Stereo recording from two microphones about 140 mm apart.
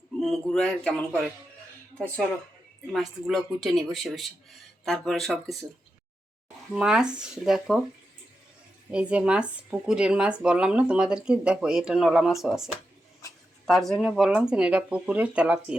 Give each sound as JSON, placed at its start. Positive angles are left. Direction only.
{"t": 0.2, "sound": "speech", "side_deg": 5}
{"t": 6.7, "sound": "speech", "side_deg": -5}
{"t": 8.9, "sound": "speech", "side_deg": -10}